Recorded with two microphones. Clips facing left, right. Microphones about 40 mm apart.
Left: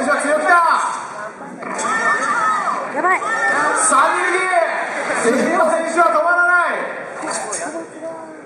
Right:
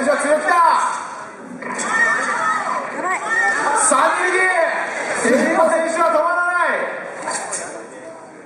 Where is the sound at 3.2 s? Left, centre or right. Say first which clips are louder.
Left 1 dB; centre.